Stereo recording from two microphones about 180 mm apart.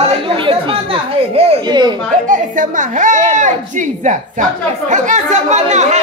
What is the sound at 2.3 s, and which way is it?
A woman's voice, 45° right (ahead or behind).